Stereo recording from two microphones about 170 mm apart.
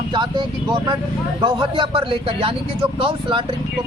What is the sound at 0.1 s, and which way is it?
Speech, 25° right (ahead or behind).